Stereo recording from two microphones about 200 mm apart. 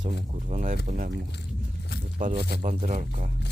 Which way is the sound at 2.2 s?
45° right (ahead or behind).